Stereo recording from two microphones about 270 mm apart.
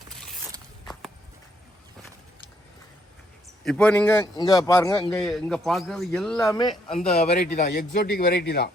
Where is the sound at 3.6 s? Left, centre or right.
Centre.